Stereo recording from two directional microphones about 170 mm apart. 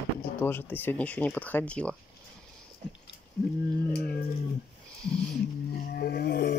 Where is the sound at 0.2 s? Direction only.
10° left (ahead or behind).